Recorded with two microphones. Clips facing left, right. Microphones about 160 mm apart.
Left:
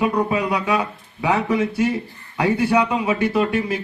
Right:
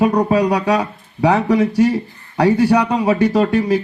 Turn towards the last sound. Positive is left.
turn(degrees=-35)  # may be behind; listen again after turning